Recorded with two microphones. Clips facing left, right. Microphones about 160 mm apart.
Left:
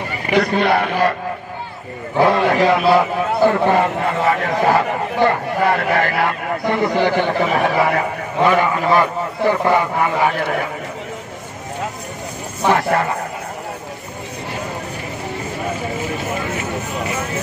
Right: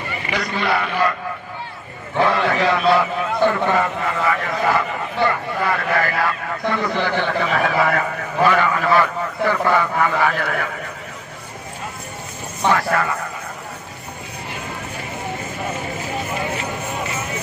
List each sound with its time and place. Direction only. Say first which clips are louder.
0.5 s a man's voice: left 5 dB; 40° left (ahead or behind)
2.2 s a man's voice: left 4 dB; 25° left (ahead or behind)
6.7 s a man's voice: left 5 dB; 25° left (ahead or behind)
12.7 s a man's voice: left 3 dB; 30° left (ahead or behind)